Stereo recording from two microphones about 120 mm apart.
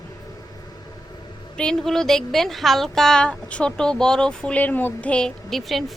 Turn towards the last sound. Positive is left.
turn(degrees=0)  # may be behind; listen again after turning